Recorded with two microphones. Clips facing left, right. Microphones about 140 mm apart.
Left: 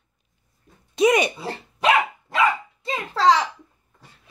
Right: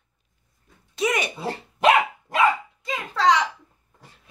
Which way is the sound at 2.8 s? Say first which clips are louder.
Left 2 dB; 30° left (ahead or behind).